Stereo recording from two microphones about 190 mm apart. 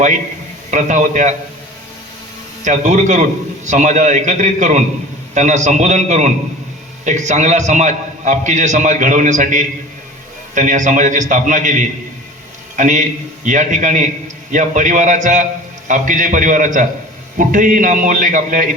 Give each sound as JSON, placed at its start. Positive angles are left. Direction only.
{"t": 0.7, "sound": "a man's voice", "side_deg": -40}
{"t": 2.6, "sound": "a man's voice", "side_deg": -40}